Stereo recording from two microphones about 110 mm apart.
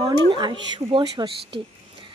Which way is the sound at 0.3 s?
50° right (ahead or behind).